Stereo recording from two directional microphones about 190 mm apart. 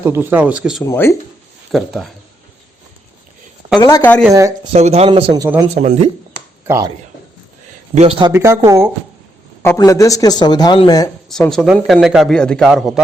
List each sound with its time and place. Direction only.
0.0 s speech: 10° right (ahead or behind)
0.9 s speech: 15° left (ahead or behind)
1.7 s a man's voice: centre (ahead or behind)
3.8 s speech: 15° left (ahead or behind)
4.3 s speech: 15° right (ahead or behind)
4.7 s speech: 35° right (ahead or behind)
5.4 s speech: 20° right (ahead or behind)
5.7 s speech: 35° right (ahead or behind)
6.7 s speech: 15° right (ahead or behind)
7.9 s speech: 30° right (ahead or behind)
8.3 s speech: 15° right (ahead or behind)
9.6 s speech: 15° left (ahead or behind)
11.3 s a man's voice: 5° left (ahead or behind)